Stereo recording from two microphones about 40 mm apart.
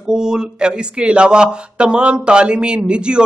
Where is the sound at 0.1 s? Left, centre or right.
Centre.